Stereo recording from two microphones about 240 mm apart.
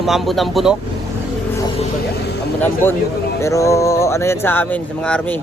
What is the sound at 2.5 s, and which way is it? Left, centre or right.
A man's voice, centre.